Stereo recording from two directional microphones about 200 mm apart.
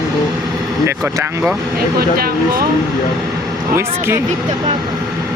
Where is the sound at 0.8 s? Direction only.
10° right (ahead or behind).